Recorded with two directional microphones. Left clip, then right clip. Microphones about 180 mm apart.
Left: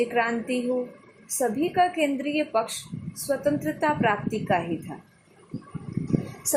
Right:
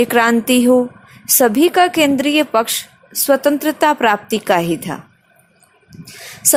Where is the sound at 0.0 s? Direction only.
60° right (ahead or behind).